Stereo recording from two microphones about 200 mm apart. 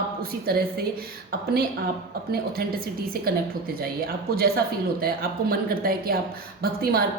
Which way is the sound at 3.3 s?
50° right (ahead or behind).